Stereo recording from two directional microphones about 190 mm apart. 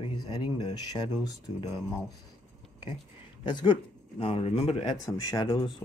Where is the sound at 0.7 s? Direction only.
25° left (ahead or behind).